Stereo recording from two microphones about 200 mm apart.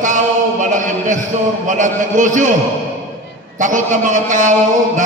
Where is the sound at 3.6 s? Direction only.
40° right (ahead or behind).